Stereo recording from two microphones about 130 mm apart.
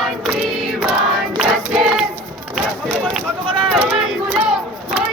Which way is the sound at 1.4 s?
5° right (ahead or behind).